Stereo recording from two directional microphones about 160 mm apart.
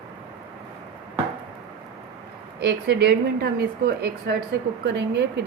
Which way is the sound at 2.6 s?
90° right.